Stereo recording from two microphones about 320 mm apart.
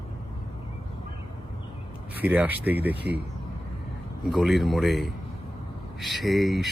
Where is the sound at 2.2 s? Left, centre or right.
Centre.